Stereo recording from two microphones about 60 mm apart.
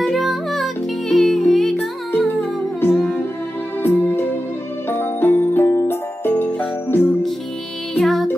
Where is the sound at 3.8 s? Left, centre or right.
Left.